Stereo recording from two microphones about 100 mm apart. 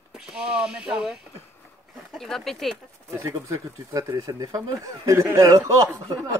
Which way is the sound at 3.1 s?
35° right (ahead or behind).